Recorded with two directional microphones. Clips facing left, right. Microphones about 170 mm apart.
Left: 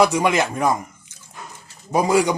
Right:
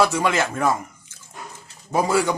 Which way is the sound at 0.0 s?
15° left (ahead or behind).